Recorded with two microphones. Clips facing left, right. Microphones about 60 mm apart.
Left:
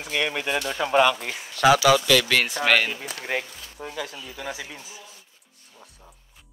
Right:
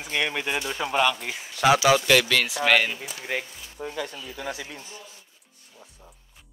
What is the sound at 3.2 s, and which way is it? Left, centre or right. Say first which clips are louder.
Speech: left 2 dB; centre.